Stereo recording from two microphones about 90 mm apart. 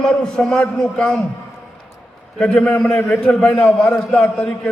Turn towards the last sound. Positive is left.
turn(degrees=10)  # may be behind; listen again after turning